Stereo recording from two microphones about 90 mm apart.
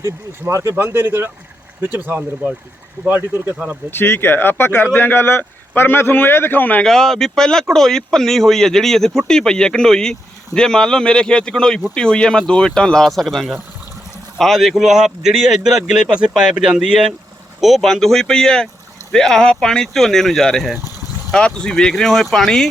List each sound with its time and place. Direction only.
0.0 s speech: 35° right (ahead or behind)
3.9 s a man's voice: 25° left (ahead or behind)
6.8 s speech: 5° left (ahead or behind)